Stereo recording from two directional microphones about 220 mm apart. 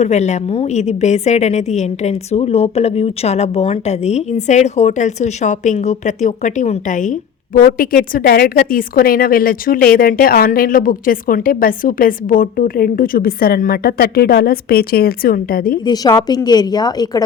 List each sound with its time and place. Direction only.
0.0 s a woman's voice: 30° left (ahead or behind)
15.9 s a woman's voice: 20° left (ahead or behind)